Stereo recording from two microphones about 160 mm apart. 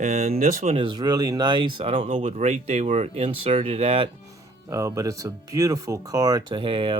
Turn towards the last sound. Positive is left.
turn(degrees=-35)  # may be behind; listen again after turning